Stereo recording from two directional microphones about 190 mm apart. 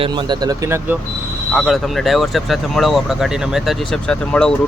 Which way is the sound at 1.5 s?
Centre (ahead or behind).